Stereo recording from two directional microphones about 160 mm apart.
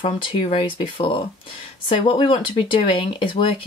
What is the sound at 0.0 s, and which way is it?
Speech, 35° left (ahead or behind).